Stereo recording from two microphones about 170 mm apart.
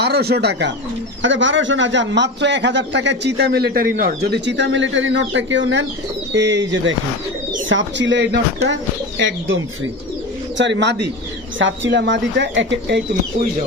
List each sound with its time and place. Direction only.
0.0 s speech: 70° right (ahead or behind)
1.2 s a man's voice: 90° right
10.6 s a man's voice: 90° right